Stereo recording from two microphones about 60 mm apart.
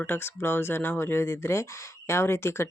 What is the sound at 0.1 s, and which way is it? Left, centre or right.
Speech, left.